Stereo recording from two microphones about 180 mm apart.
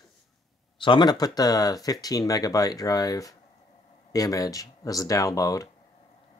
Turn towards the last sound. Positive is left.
turn(degrees=20)  # may be behind; listen again after turning